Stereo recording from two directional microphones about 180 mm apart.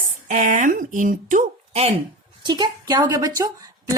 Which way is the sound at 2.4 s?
25° right (ahead or behind).